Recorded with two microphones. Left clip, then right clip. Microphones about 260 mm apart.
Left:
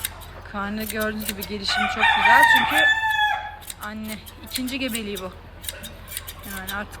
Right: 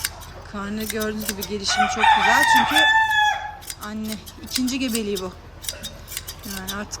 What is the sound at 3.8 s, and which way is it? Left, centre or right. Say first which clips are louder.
Speech: even; centre.